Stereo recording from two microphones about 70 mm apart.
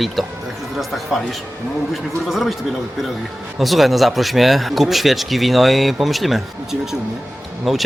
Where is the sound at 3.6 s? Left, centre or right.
Centre.